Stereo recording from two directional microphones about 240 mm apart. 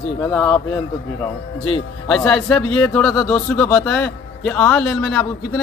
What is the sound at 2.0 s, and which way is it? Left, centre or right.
Speech, centre.